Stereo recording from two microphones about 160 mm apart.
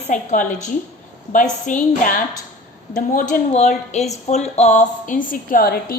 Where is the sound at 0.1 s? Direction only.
50° left (ahead or behind).